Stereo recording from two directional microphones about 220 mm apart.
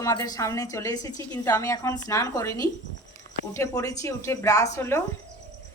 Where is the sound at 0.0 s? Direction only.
15° left (ahead or behind).